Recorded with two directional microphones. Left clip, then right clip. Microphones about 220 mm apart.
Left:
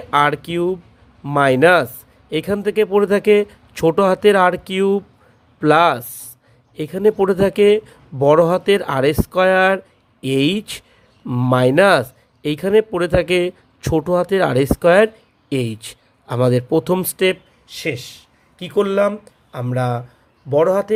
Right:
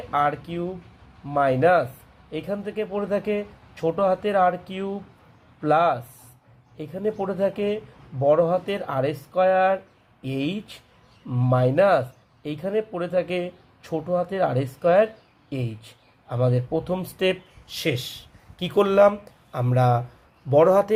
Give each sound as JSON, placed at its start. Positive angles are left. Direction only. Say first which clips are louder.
{"t": 0.1, "sound": "a man's voice", "louder": "left 7 dB", "side_deg": 40}
{"t": 17.7, "sound": "speech", "louder": "left 2 dB", "side_deg": 15}